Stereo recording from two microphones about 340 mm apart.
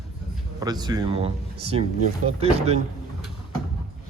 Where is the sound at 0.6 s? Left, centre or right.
Centre.